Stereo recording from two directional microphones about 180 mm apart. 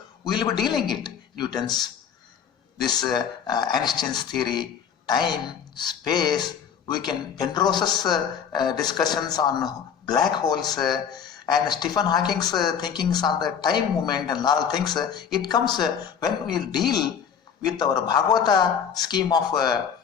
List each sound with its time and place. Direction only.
0.3 s a man's voice: 25° left (ahead or behind)